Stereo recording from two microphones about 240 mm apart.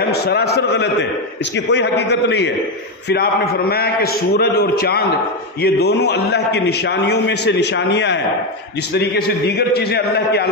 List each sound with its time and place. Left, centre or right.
0.1 s a man's voice: left